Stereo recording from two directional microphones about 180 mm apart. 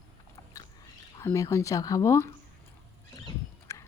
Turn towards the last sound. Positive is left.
turn(degrees=15)  # may be behind; listen again after turning